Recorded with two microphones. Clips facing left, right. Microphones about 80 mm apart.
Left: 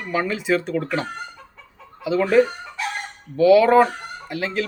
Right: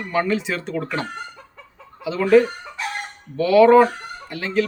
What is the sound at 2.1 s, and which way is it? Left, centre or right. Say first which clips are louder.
Chicken: right 4 dB; centre.